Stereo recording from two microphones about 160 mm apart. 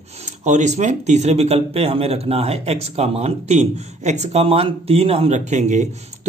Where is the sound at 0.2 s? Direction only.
45° right (ahead or behind).